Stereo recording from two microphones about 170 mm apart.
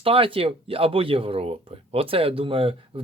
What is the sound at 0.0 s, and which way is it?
Speech, 35° right (ahead or behind).